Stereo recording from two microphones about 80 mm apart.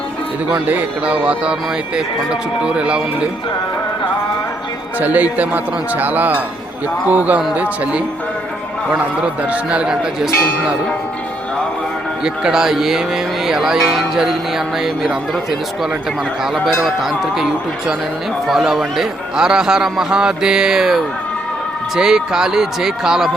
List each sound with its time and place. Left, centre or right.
0.7 s a man's voice: right
4.9 s a man's voice: right
12.2 s a man's voice: centre